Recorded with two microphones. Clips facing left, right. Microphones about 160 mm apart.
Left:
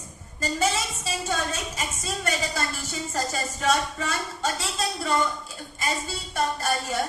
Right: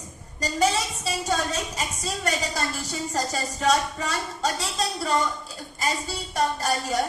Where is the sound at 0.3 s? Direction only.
35° right (ahead or behind).